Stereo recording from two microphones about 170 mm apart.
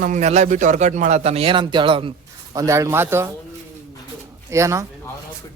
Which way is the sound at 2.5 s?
20° right (ahead or behind).